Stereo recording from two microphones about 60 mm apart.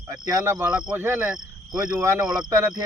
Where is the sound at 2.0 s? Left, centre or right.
Right.